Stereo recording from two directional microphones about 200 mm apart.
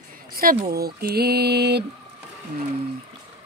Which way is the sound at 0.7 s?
50° right (ahead or behind).